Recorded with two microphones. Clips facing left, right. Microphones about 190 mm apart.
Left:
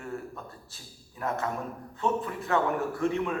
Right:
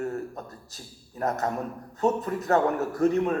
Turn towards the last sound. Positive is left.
turn(degrees=-40)  # may be behind; listen again after turning